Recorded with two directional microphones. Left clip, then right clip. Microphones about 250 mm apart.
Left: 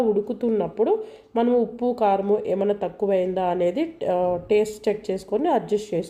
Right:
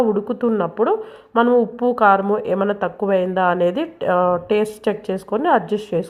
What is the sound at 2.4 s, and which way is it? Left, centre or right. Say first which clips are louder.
A woman's voice: right 3 dB; centre.